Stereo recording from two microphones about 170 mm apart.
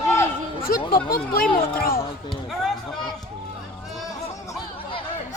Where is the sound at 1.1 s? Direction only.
60° left (ahead or behind).